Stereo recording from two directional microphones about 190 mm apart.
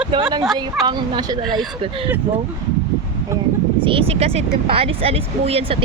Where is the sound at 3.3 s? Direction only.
15° right (ahead or behind).